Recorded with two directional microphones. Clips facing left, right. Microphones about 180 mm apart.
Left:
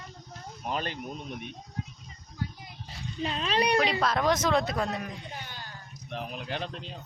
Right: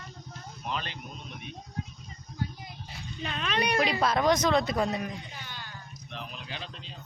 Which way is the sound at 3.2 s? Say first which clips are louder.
Left 3 dB; 30° left (ahead or behind).